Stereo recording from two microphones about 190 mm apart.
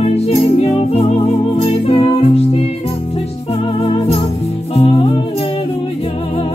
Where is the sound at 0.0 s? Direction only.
30° left (ahead or behind).